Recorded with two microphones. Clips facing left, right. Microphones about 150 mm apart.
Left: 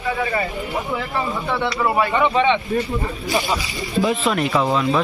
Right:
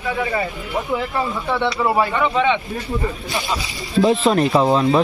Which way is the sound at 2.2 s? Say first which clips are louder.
Left 1 dB; centre (ahead or behind).